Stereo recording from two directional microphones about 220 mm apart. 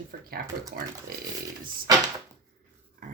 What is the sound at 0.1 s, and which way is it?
Speech, 40° right (ahead or behind).